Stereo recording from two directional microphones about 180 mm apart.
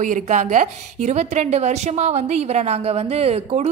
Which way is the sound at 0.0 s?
45° right (ahead or behind).